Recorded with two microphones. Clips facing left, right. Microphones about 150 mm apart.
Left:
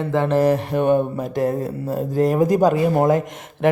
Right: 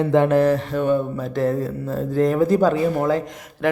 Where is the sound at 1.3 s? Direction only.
45° left (ahead or behind).